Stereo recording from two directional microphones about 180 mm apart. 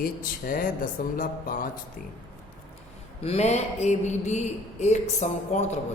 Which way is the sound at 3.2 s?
35° left (ahead or behind).